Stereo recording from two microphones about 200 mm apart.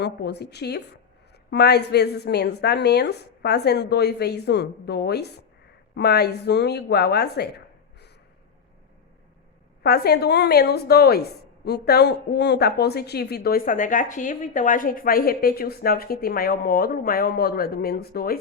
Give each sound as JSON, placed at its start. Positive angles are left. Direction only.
{"t": 0.0, "sound": "a woman's voice", "side_deg": 55}
{"t": 9.8, "sound": "a woman's voice", "side_deg": 55}